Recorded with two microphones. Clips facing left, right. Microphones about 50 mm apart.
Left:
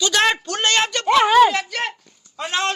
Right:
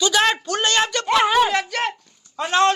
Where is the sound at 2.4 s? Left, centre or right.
Centre.